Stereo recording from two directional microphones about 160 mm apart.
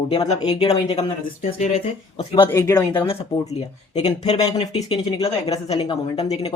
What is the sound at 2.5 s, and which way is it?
Speech, 20° left (ahead or behind).